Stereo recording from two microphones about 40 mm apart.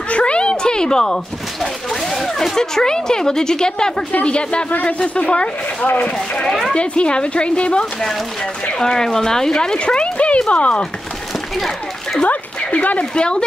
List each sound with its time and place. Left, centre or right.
0.1 s a sound: left
1.6 s speech: centre
4.1 s speech: left
6.4 s speech: centre
6.7 s speech: left
8.7 s speech: centre
11.5 s speech: centre
12.3 s speech: left
13.1 s speech: left